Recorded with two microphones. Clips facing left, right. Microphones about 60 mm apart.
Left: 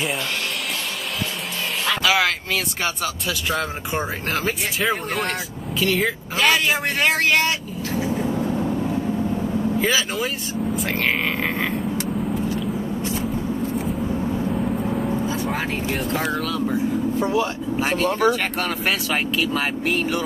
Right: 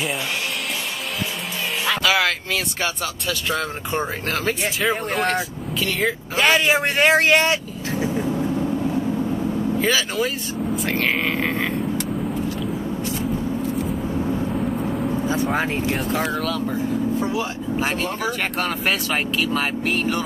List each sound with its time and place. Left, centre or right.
1.9 s speech: centre
6.5 s speech: right
9.8 s speech: centre
15.5 s speech: right
15.9 s speech: centre
17.2 s speech: left
17.7 s speech: centre